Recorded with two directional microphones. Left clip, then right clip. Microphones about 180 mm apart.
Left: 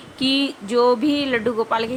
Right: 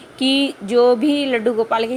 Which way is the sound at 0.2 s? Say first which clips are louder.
Right 3 dB; 10° right (ahead or behind).